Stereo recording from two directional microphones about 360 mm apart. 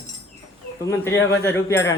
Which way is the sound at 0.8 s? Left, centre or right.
Centre.